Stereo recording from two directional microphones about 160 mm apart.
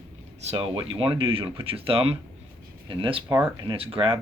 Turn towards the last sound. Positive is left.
turn(degrees=-35)  # may be behind; listen again after turning